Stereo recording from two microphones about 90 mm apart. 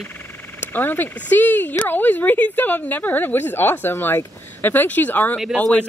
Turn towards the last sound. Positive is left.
turn(degrees=15)  # may be behind; listen again after turning